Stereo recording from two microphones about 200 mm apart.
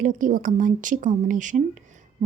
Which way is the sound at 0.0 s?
40° right (ahead or behind).